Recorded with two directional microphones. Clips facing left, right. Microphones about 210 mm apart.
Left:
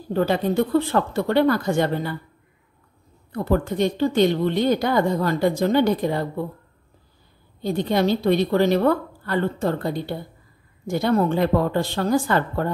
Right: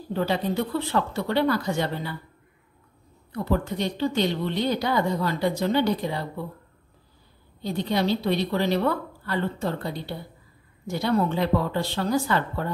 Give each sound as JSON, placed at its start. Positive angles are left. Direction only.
{"t": 0.1, "sound": "a woman's voice", "side_deg": 50}
{"t": 3.3, "sound": "a woman's voice", "side_deg": 50}
{"t": 7.6, "sound": "a woman's voice", "side_deg": 50}